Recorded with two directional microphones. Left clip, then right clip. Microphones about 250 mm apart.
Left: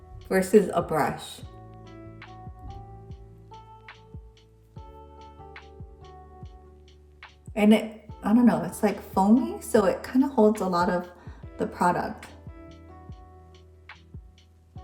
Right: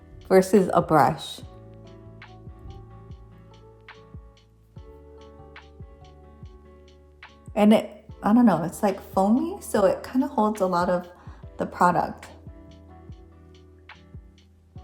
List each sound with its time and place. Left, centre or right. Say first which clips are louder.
0.3 s speech: right 3 dB; centre
2.1 s music: left 2 dB; centre
7.5 s a woman's voice: right 3 dB; centre